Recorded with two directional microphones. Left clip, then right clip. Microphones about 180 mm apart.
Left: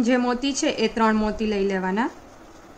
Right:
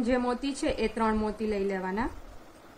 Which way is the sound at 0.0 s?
10° left (ahead or behind).